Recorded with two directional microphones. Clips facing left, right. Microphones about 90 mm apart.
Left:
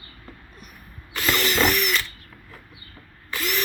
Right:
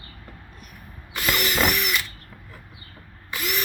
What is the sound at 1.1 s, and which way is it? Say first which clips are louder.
Ratchet: left 2 dB; 10° right (ahead or behind).